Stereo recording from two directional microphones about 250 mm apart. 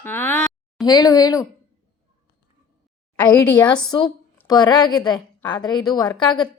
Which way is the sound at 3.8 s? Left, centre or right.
Centre.